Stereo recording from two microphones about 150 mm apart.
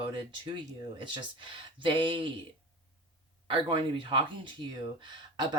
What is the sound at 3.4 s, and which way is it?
Speech, 35° right (ahead or behind).